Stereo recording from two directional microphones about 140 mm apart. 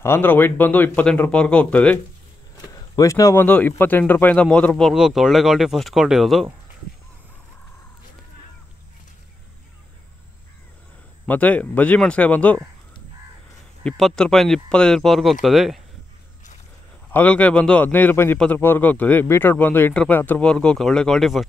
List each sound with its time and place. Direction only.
0.0 s speech: 15° left (ahead or behind)
2.5 s a sound: 25° left (ahead or behind)
3.4 s speech: 10° left (ahead or behind)
11.2 s speech: 10° left (ahead or behind)
13.8 s speech: 5° left (ahead or behind)
17.1 s speech: 10° left (ahead or behind)